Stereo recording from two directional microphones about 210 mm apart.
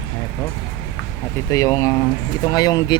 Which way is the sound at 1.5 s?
15° left (ahead or behind).